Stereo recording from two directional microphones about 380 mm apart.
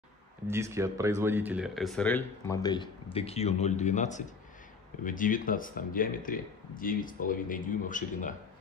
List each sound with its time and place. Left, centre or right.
0.5 s speech: centre